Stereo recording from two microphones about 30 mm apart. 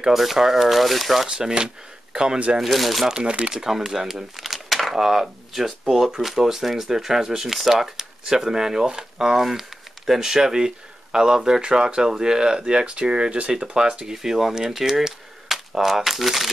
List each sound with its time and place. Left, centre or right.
0.1 s speech: centre
1.3 s speech: right
2.2 s speech: right
2.6 s speech: centre
3.2 s speech: right
3.5 s speech: centre
4.6 s a sound: centre
4.9 s speech: centre
10.3 s speech: right
14.1 s speech: centre
15.0 s a sound: centre